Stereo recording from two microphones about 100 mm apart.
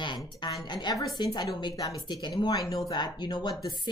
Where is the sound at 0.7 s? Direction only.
45° left (ahead or behind).